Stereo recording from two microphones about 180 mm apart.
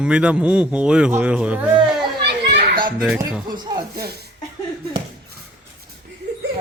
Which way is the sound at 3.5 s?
25° right (ahead or behind).